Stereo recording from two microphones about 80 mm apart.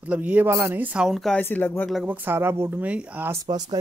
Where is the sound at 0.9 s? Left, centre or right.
Centre.